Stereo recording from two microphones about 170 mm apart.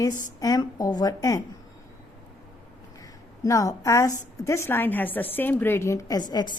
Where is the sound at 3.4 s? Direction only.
20° left (ahead or behind).